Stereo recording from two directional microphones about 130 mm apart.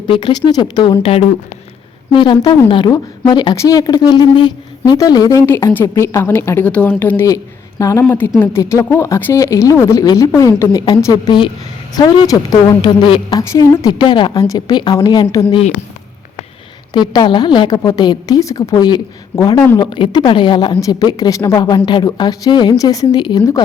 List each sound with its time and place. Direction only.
0.1 s a woman's voice: 35° left (ahead or behind)
1.0 s speech: 50° left (ahead or behind)
2.1 s a woman's voice: 35° left (ahead or behind); by 7.3 s 10° left (ahead or behind)
7.8 s a woman's voice: 25° left (ahead or behind)
13.5 s a woman's voice: 30° left (ahead or behind)
14.3 s a woman's voice: 25° left (ahead or behind)
16.9 s a woman's voice: 35° left (ahead or behind)